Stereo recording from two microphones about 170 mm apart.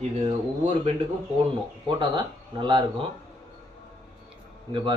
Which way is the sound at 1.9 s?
25° right (ahead or behind).